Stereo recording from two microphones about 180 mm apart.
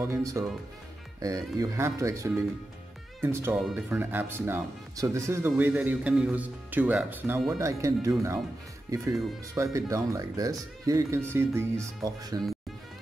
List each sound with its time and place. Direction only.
0.0 s speech: 15° right (ahead or behind)